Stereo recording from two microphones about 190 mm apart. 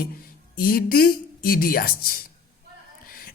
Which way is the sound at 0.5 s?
50° left (ahead or behind).